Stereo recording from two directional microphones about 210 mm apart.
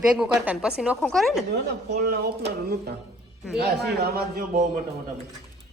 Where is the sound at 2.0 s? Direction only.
45° right (ahead or behind).